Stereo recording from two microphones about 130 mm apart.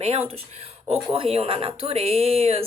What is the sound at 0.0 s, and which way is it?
Speech, 50° right (ahead or behind).